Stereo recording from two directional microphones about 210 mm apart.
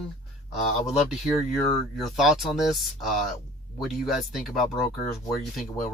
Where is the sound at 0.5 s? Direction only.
Centre (ahead or behind).